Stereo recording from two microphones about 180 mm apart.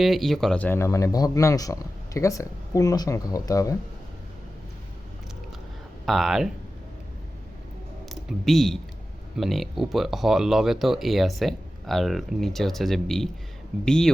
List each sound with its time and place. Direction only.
0.0 s speech: centre (ahead or behind); by 3.8 s 20° left (ahead or behind)
6.1 s speech: centre (ahead or behind)
8.1 s speech: centre (ahead or behind)